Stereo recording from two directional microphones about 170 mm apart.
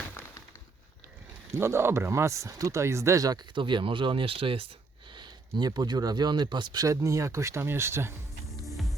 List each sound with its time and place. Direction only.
1.5 s speech: 15° right (ahead or behind)
8.6 s music: centre (ahead or behind)